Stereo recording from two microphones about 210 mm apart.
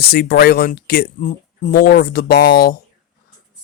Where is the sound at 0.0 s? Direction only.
50° left (ahead or behind).